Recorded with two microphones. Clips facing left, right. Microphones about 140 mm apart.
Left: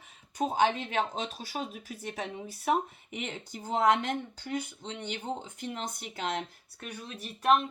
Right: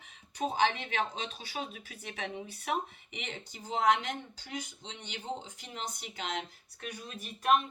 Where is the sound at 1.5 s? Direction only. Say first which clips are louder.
Left 3 dB; 45° left (ahead or behind).